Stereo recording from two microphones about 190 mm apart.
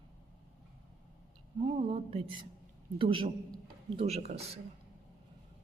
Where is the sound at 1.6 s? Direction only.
30° right (ahead or behind).